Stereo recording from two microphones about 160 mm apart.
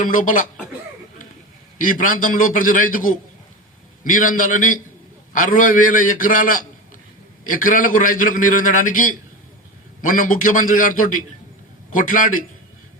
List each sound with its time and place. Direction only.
0.0 s a man's voice: 55° left (ahead or behind)
1.8 s a man's voice: 55° left (ahead or behind)
4.1 s a man's voice: 55° left (ahead or behind)